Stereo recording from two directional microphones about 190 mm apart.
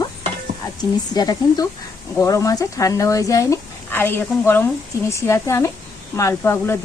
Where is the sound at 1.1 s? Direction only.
20° left (ahead or behind).